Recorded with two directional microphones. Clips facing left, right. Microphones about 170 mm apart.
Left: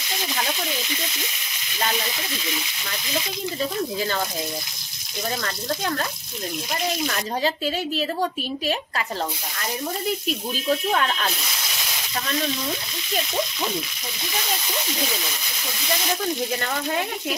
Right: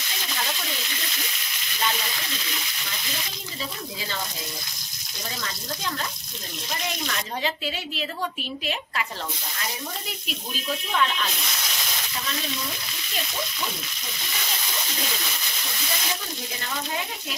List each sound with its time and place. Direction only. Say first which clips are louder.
7.1 s speech: left 5 dB; 40° left (ahead or behind)
10.9 s speech: left 2 dB; 45° left (ahead or behind)